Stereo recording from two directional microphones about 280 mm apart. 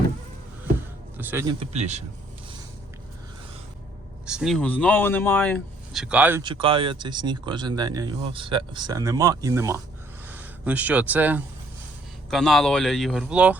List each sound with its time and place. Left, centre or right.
1.2 s speech: centre; by 2.0 s right
4.3 s speech: centre
6.4 s speech: centre